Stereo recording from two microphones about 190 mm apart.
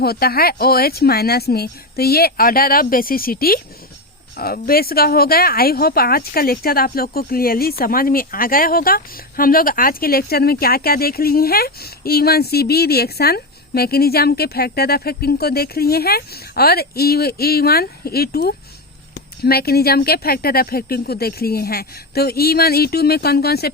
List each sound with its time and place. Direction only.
0.0 s speech: 55° left (ahead or behind)